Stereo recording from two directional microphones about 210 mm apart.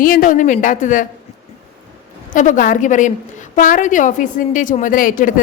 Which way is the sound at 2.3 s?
35° left (ahead or behind).